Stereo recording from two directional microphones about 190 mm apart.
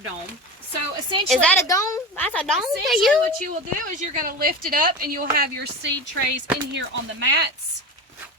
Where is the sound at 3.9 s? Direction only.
45° right (ahead or behind).